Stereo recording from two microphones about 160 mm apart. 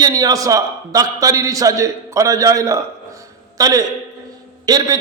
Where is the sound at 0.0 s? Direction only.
25° right (ahead or behind).